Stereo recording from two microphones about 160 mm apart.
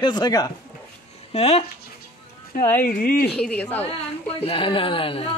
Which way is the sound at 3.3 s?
5° left (ahead or behind).